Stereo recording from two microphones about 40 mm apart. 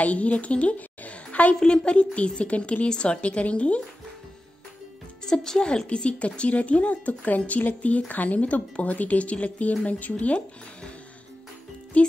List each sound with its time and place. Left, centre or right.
0.0 s a child's voice: left
5.2 s speech: centre
6.0 s speech: left
10.1 s speech: left
11.9 s speech: left